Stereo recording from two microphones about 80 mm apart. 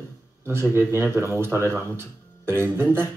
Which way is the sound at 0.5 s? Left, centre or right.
Right.